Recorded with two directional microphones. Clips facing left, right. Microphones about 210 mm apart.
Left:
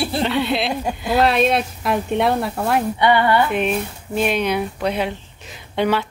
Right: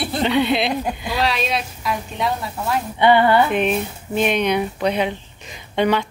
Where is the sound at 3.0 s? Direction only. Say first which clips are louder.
Right 4 dB; 25° right (ahead or behind).